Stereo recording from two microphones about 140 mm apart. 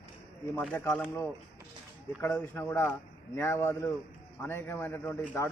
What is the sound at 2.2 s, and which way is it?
A man's voice, 15° left (ahead or behind).